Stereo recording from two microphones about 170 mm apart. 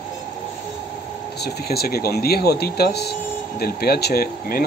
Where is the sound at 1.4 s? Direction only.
65° left (ahead or behind).